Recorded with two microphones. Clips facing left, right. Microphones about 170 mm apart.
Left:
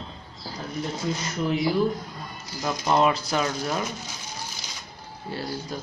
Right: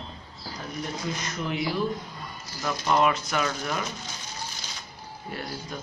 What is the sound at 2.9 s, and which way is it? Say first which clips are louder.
Speech: left 2 dB; 30° left (ahead or behind).